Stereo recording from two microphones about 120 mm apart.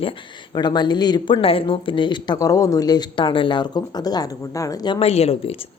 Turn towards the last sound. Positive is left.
turn(degrees=60)  # may be behind; listen again after turning